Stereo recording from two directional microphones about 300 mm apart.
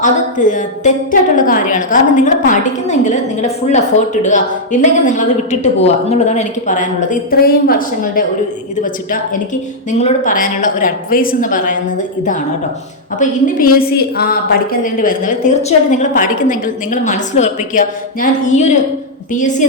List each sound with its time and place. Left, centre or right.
0.0 s a woman's voice: left
10.0 s a woman's voice: left
13.1 s a woman's voice: left